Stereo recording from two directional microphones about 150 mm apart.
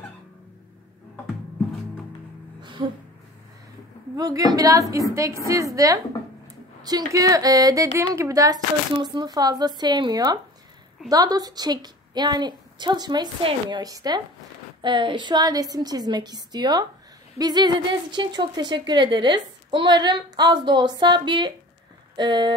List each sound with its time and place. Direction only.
2.6 s music: 30° right (ahead or behind)
4.2 s a woman's voice: 25° right (ahead or behind)